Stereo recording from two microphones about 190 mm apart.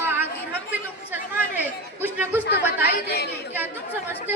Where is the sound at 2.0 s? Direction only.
10° right (ahead or behind).